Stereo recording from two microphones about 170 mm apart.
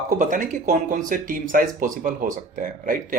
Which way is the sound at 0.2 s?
50° right (ahead or behind).